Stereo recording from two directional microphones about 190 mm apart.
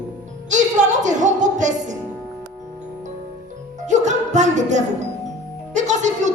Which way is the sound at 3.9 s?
40° right (ahead or behind).